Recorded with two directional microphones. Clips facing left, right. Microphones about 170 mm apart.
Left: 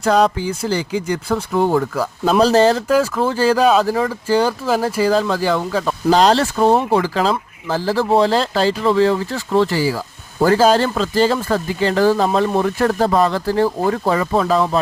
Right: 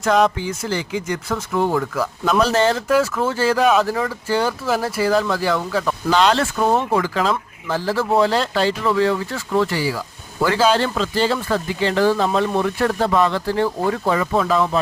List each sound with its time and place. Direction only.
0.0 s speech: 35° left (ahead or behind)